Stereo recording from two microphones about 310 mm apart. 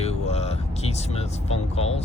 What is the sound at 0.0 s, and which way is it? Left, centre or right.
Vehicle, left.